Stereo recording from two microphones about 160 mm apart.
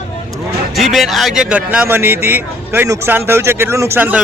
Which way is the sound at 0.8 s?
Centre (ahead or behind).